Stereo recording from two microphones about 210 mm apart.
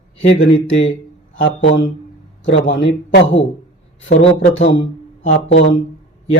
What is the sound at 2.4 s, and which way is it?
Speech, 60° left (ahead or behind).